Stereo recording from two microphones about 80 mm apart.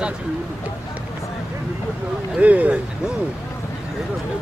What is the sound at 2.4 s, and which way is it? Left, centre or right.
Speech, centre.